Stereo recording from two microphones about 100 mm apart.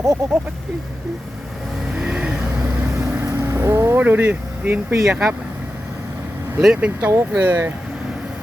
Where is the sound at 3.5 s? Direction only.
25° right (ahead or behind).